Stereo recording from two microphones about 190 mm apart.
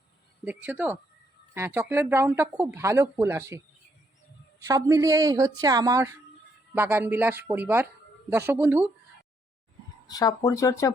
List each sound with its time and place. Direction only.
0.4 s speech: 10° right (ahead or behind)
4.6 s a woman's voice: 15° right (ahead or behind)
10.1 s speech: 20° left (ahead or behind)